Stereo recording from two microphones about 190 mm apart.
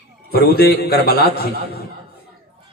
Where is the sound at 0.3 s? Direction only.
55° left (ahead or behind).